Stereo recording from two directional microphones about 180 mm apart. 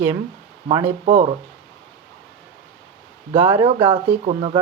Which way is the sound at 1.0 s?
40° right (ahead or behind).